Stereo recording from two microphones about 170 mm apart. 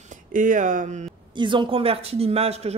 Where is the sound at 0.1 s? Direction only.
50° right (ahead or behind).